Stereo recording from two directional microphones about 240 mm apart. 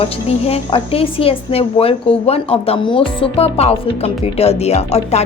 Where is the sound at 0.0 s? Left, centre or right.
Left.